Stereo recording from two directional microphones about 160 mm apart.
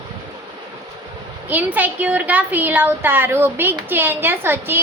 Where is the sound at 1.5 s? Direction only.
10° right (ahead or behind).